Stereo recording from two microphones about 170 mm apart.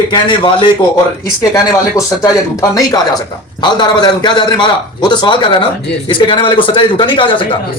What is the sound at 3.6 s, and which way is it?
A man's voice, 25° left (ahead or behind).